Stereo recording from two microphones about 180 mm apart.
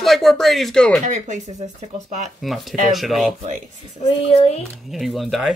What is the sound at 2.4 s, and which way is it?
Speech, centre (ahead or behind).